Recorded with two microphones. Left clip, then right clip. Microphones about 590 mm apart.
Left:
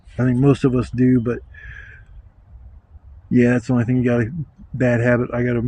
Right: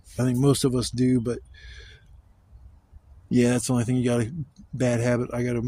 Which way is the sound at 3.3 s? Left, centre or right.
Right.